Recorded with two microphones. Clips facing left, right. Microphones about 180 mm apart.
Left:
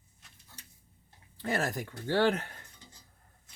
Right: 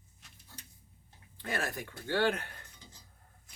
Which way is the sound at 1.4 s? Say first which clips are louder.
Left 4 dB; 40° left (ahead or behind).